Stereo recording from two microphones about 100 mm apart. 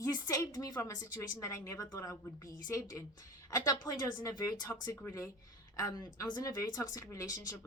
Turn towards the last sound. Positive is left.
turn(degrees=35)  # may be behind; listen again after turning